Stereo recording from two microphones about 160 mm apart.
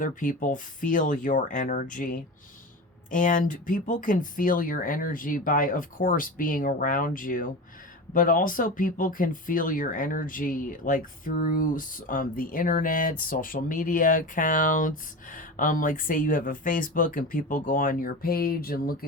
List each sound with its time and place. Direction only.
0.0 s speech: 55° left (ahead or behind)